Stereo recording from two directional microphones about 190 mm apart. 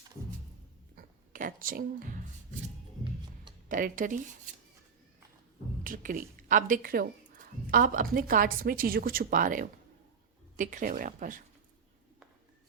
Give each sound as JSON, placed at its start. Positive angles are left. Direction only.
{"t": 0.9, "sound": "a sound", "side_deg": -45}
{"t": 3.7, "sound": "speech", "side_deg": -45}
{"t": 5.8, "sound": "speech", "side_deg": -45}